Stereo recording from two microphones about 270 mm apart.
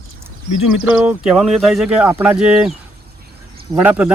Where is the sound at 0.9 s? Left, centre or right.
Centre.